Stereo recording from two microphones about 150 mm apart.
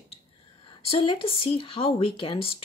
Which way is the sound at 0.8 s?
35° left (ahead or behind).